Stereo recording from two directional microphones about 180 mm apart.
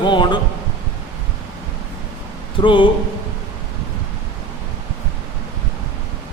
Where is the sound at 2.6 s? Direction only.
25° left (ahead or behind).